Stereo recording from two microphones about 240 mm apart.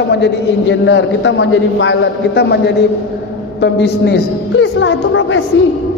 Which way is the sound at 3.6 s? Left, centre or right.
Left.